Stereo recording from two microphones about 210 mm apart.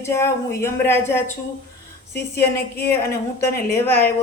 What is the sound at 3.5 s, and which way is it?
Speech, 45° left (ahead or behind).